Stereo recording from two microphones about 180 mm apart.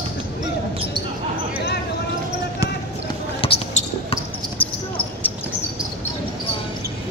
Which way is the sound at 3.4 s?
35° left (ahead or behind).